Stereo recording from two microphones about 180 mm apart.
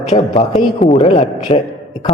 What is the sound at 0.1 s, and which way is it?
A man's voice, 35° left (ahead or behind).